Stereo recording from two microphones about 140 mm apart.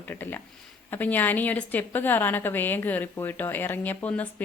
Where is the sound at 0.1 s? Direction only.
15° left (ahead or behind).